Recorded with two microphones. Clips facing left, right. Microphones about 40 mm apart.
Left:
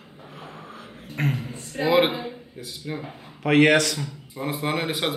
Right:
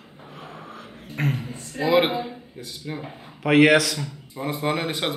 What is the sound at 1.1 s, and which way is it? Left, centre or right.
A man's voice, centre.